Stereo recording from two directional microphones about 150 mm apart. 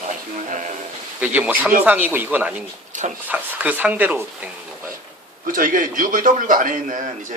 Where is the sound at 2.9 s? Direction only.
55° right (ahead or behind).